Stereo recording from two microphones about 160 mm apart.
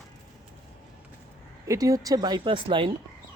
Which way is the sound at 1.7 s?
20° right (ahead or behind).